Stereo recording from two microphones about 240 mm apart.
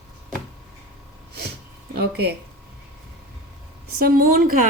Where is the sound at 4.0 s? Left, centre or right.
Right.